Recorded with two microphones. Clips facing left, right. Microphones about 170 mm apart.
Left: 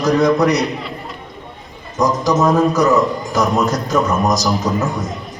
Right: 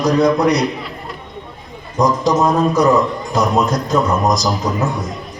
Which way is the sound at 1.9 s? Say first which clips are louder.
Right 1 dB; 30° right (ahead or behind).